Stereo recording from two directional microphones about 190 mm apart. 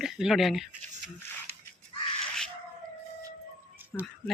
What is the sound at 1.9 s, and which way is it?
Crow, 25° left (ahead or behind).